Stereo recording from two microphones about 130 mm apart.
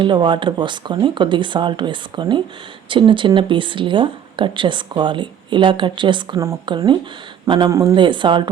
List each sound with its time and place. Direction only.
0.0 s speech: 35° right (ahead or behind)
7.7 s speech: 25° right (ahead or behind)
7.9 s speech: 40° right (ahead or behind)